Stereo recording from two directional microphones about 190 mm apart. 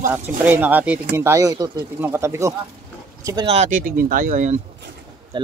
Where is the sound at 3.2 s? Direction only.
30° right (ahead or behind).